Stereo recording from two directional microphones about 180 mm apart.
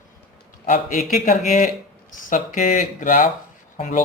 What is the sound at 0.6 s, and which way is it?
Speech, 50° left (ahead or behind).